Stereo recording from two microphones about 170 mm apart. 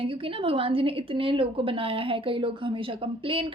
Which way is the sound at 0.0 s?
30° right (ahead or behind).